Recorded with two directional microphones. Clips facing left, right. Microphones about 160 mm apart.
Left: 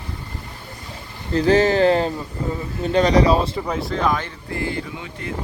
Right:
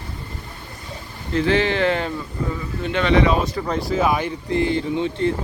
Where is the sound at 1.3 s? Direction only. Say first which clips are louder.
Left 3 dB; 40° left (ahead or behind).